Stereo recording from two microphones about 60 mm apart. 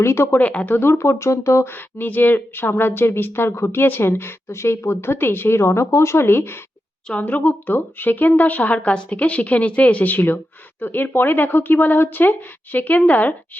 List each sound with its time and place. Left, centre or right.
0.0 s speech: left
0.3 s speech: left
0.8 s speech: left
1.7 s speech: left
7.1 s speech: left